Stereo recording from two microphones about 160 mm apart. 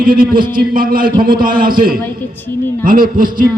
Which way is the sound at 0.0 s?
65° right (ahead or behind).